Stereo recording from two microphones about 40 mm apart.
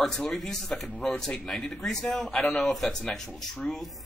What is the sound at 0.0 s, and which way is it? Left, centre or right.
Speech, centre.